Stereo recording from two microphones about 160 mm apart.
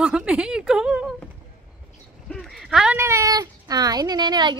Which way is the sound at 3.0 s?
20° right (ahead or behind).